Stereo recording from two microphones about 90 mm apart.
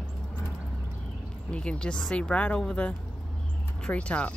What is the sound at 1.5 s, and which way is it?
Speech, 10° left (ahead or behind).